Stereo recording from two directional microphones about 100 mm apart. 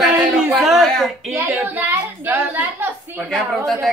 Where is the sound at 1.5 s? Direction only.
20° right (ahead or behind).